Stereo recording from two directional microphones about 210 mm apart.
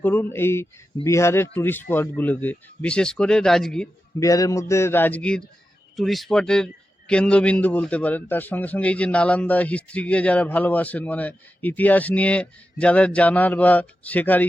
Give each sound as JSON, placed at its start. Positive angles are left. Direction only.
{"t": 0.0, "sound": "a man's voice", "side_deg": 10}
{"t": 4.2, "sound": "a man's voice", "side_deg": 15}